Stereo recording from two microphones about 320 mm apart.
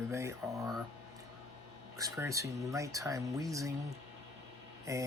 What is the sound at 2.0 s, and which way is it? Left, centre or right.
Speech, centre.